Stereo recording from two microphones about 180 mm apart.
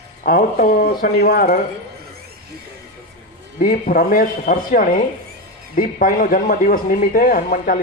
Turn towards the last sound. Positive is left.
turn(degrees=50)  # may be behind; listen again after turning